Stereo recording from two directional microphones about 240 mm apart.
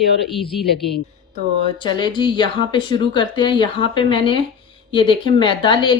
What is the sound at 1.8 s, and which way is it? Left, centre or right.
Speech, centre.